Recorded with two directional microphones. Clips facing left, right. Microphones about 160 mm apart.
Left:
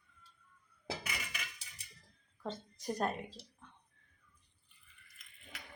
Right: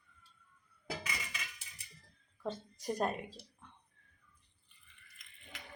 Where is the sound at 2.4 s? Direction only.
10° right (ahead or behind).